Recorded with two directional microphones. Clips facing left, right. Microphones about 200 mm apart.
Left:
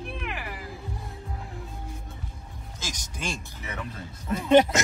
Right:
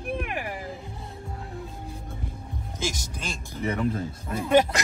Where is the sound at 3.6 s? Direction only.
45° right (ahead or behind).